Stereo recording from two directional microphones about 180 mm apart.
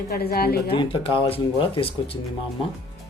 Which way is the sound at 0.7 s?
30° left (ahead or behind).